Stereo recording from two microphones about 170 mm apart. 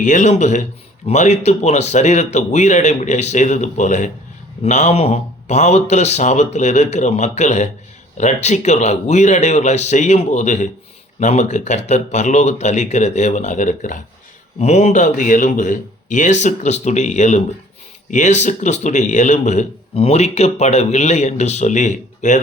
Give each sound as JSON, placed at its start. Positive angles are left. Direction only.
{"t": 0.0, "sound": "a man's voice", "side_deg": 45}